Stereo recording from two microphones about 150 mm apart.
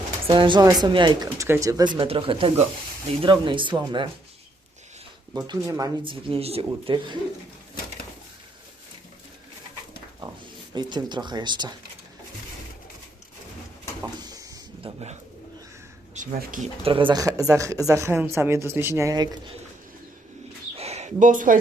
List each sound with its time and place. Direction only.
0.3 s speech: 35° right (ahead or behind)
5.3 s speech: 25° right (ahead or behind)
6.1 s speech: 35° right (ahead or behind)
10.8 s speech: 30° right (ahead or behind)
14.2 s a sound: 25° right (ahead or behind)
16.1 s speech: 65° right (ahead or behind)
16.8 s speech: 35° right (ahead or behind)
20.7 s a sound: 45° right (ahead or behind); by 21.6 s 60° right (ahead or behind)